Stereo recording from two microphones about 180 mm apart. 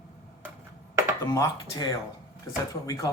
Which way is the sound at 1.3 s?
20° left (ahead or behind).